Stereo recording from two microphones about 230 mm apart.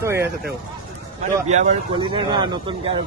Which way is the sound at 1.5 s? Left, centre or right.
Right.